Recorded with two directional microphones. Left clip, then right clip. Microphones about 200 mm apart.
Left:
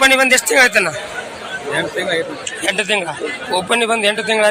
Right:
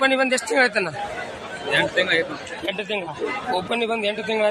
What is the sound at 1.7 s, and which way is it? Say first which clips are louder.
Speech: even; 35° left (ahead or behind).